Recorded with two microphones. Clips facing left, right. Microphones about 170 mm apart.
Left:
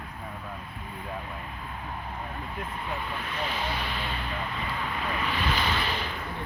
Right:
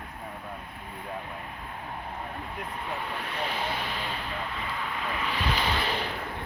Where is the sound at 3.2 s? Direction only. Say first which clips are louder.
Even; 65° right (ahead or behind); by 4.0 s 45° right (ahead or behind).